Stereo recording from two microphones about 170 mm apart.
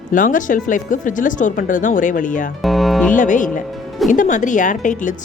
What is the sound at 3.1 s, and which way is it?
Speech, 50° left (ahead or behind).